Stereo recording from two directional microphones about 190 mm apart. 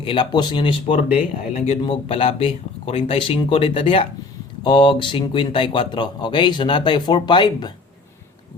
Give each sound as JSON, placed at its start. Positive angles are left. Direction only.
{"t": 0.0, "sound": "a man's voice", "side_deg": 25}